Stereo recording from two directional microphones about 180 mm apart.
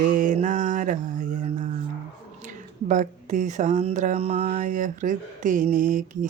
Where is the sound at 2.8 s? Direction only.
45° right (ahead or behind).